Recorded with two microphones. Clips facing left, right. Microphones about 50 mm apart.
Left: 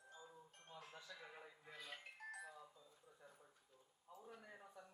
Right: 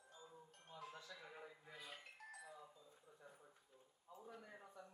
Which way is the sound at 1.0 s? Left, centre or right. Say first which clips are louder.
Right 1 dB; centre.